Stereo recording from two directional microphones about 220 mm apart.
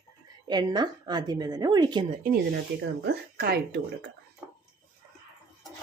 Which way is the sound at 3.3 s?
45° right (ahead or behind).